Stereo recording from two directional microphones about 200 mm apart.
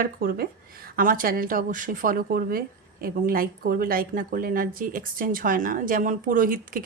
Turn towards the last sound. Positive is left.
turn(degrees=-45)  # may be behind; listen again after turning